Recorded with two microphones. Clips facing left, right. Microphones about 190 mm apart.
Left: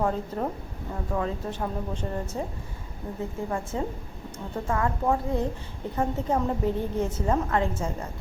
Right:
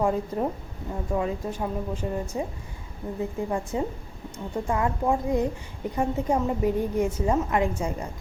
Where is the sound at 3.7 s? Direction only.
15° right (ahead or behind).